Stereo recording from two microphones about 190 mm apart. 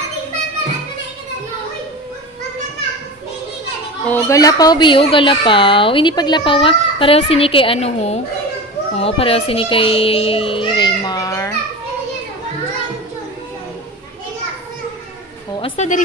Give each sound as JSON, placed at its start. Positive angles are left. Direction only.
{"t": 4.1, "sound": "a woman's voice", "side_deg": 15}
{"t": 15.6, "sound": "a woman's voice", "side_deg": 30}